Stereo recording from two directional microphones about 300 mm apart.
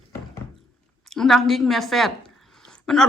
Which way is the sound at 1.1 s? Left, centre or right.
Centre.